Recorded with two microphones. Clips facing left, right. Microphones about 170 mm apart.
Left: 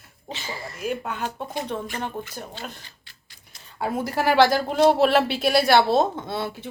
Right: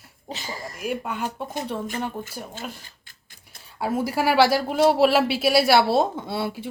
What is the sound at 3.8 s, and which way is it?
Speech, 5° right (ahead or behind).